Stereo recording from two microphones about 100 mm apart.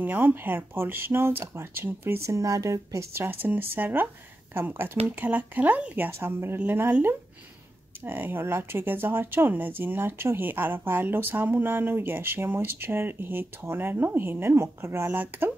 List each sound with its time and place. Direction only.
0.0 s speech: 20° right (ahead or behind)